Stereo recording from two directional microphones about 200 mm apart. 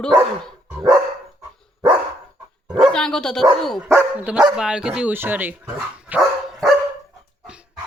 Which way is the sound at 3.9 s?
10° right (ahead or behind).